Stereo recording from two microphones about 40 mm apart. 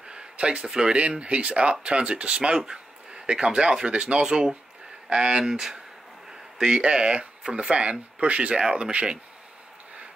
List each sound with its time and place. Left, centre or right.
0.1 s a sound: right
0.7 s speech: centre
0.9 s speech: right
4.3 s speech: centre
5.4 s speech: centre
6.6 s speech: right